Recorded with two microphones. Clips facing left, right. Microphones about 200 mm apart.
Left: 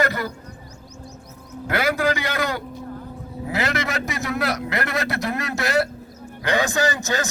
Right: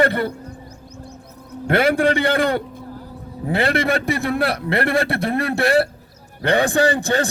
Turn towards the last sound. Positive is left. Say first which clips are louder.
# right 5 dB
turn(degrees=-30)  # may be behind; listen again after turning